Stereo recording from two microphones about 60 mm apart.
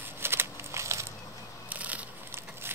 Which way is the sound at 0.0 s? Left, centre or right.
Right.